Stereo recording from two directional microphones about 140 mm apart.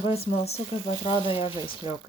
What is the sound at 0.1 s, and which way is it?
Speech, 45° left (ahead or behind).